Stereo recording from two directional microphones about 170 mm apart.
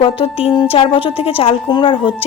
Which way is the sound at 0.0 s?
35° left (ahead or behind).